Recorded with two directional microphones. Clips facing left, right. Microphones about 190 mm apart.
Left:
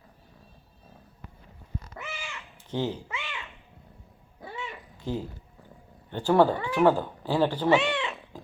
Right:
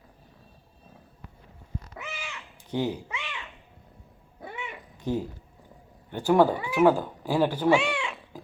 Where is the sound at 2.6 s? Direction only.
15° right (ahead or behind).